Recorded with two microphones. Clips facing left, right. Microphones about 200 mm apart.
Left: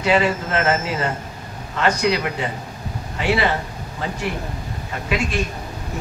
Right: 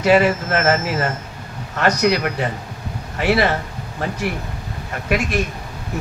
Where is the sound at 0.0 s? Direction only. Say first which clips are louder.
Right 4 dB; 45° right (ahead or behind).